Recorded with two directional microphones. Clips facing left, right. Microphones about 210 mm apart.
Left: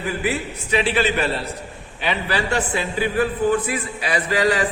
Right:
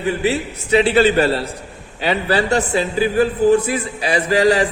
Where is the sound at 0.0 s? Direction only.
30° right (ahead or behind).